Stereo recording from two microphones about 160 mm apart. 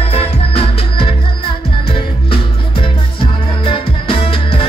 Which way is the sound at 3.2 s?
30° left (ahead or behind).